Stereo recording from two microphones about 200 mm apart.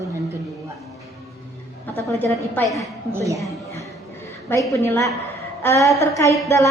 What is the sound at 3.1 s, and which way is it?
Speech, 15° right (ahead or behind).